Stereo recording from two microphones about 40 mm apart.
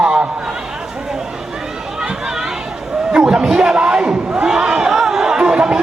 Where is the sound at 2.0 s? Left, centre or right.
Centre.